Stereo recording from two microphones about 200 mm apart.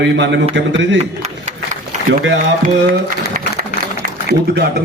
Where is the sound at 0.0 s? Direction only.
60° right (ahead or behind).